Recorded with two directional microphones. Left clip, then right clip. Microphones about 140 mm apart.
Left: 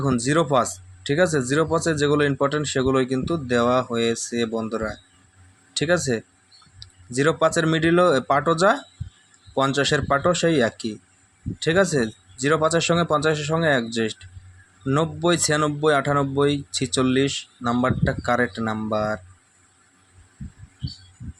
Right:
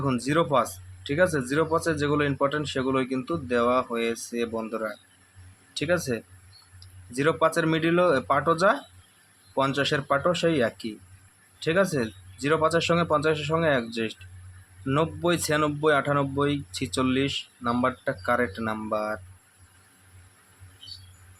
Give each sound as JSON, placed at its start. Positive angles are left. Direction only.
{"t": 0.0, "sound": "speech", "side_deg": 30}